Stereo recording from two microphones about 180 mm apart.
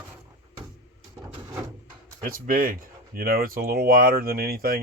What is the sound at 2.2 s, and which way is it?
Speech, 50° right (ahead or behind).